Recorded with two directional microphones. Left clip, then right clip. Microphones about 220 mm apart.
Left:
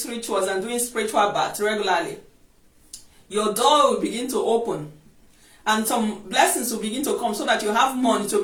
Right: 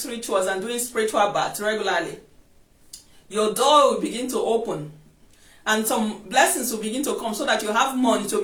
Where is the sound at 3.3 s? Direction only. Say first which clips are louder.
Even; 15° right (ahead or behind).